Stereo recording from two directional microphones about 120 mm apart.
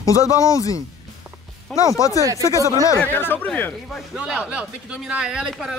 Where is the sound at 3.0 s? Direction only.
15° left (ahead or behind).